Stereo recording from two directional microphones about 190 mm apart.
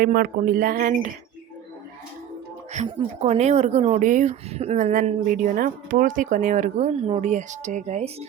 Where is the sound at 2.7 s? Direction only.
35° right (ahead or behind).